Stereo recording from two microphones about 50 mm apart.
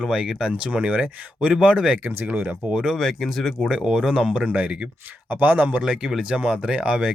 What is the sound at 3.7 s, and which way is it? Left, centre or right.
Speech, centre.